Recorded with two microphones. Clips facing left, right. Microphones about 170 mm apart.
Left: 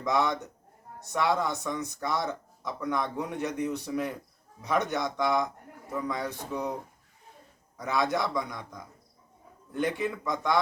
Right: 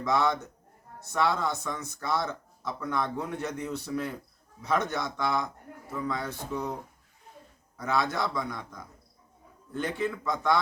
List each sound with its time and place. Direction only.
0.0 s speech: 15° left (ahead or behind)
7.8 s speech: 15° left (ahead or behind)
9.7 s speech: 15° left (ahead or behind)